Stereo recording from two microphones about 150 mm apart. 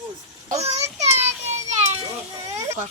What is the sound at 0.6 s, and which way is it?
Speech, 45° right (ahead or behind).